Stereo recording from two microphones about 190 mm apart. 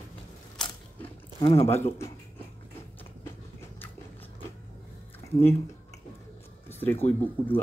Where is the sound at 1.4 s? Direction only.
35° left (ahead or behind).